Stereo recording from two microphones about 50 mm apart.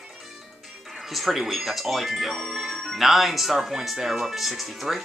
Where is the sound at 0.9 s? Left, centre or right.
Centre.